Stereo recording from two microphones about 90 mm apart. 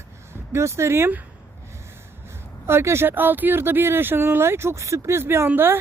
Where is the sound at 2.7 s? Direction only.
30° right (ahead or behind).